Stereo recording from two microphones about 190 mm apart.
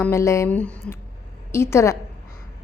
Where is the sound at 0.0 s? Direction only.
15° left (ahead or behind).